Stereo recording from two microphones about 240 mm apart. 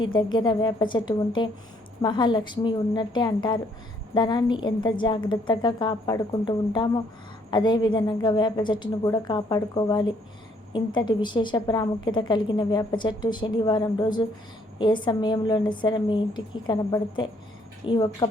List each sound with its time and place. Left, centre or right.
0.0 s a woman's voice: centre